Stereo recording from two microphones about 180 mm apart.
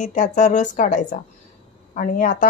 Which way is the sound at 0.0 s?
45° left (ahead or behind).